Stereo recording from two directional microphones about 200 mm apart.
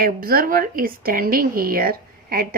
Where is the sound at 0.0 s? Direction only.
45° right (ahead or behind).